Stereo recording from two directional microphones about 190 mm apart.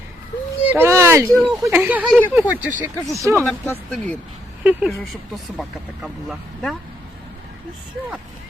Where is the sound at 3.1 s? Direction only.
15° right (ahead or behind).